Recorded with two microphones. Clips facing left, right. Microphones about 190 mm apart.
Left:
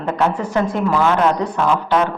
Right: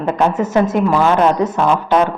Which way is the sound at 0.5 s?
20° right (ahead or behind).